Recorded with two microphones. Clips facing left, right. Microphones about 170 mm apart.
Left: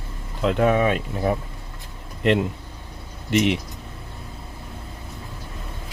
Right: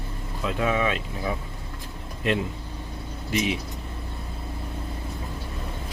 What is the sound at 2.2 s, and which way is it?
Speech, 65° left (ahead or behind).